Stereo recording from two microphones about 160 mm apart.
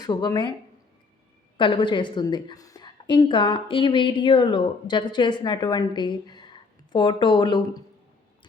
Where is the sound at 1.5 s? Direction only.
30° left (ahead or behind).